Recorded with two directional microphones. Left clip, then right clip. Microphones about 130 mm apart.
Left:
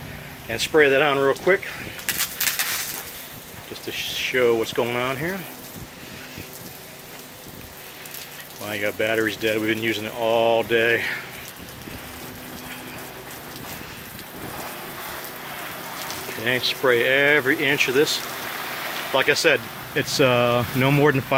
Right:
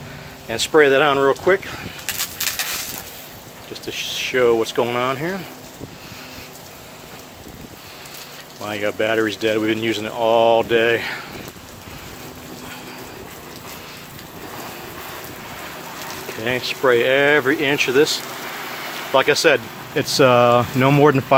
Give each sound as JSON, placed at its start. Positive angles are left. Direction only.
{"t": 0.4, "sound": "speech", "side_deg": -15}
{"t": 2.4, "sound": "a sound", "side_deg": -50}
{"t": 3.8, "sound": "speech", "side_deg": -15}
{"t": 8.6, "sound": "speech", "side_deg": -15}
{"t": 16.5, "sound": "speech", "side_deg": -5}
{"t": 16.9, "sound": "speech", "side_deg": -20}